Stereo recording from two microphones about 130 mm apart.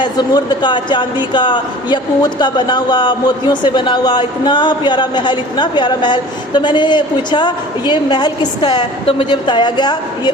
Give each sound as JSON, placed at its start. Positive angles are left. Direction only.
{"t": 0.0, "sound": "a woman's voice", "side_deg": 35}